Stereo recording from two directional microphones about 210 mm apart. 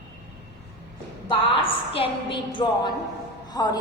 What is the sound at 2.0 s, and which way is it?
A woman's voice, 25° left (ahead or behind).